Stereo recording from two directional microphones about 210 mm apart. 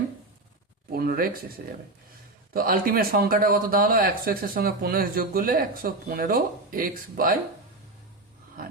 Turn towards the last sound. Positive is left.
turn(degrees=-40)  # may be behind; listen again after turning